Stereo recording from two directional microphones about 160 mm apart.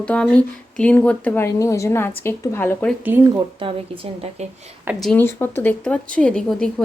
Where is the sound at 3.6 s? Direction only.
35° right (ahead or behind).